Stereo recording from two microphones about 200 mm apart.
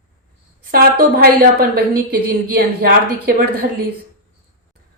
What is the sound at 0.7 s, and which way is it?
A woman's voice, 50° right (ahead or behind).